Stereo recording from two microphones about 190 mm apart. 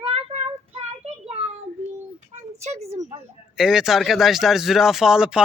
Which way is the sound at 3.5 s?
Centre (ahead or behind).